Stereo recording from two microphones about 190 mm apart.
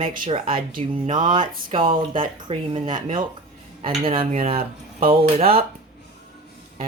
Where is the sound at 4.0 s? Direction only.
30° right (ahead or behind).